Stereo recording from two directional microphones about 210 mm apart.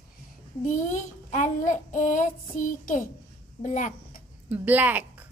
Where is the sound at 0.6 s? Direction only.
35° left (ahead or behind).